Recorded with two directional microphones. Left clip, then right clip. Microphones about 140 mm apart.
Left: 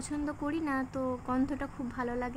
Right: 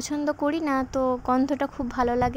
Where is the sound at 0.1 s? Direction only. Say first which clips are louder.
Right 9 dB; 60° right (ahead or behind).